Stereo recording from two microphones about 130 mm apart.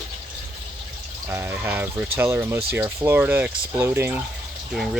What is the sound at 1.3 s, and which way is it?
Speech, 15° right (ahead or behind).